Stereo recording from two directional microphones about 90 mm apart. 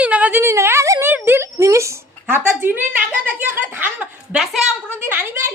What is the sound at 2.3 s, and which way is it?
Speech, 20° right (ahead or behind).